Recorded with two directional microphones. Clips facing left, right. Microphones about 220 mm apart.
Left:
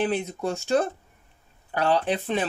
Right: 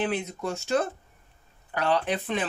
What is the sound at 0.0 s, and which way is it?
Speech, 30° left (ahead or behind).